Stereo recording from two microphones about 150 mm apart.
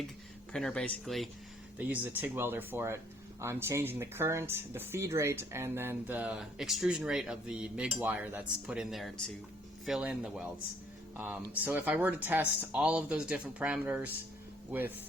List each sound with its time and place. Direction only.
0.5 s speech: 5° left (ahead or behind)
1.8 s speech: 10° right (ahead or behind)